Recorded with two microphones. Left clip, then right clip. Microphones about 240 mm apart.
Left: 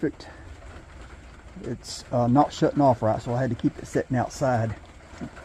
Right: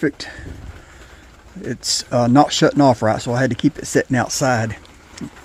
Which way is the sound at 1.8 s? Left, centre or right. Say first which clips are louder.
Right 17 dB; right.